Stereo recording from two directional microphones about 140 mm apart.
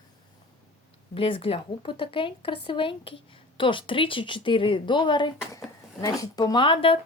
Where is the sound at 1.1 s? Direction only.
40° left (ahead or behind).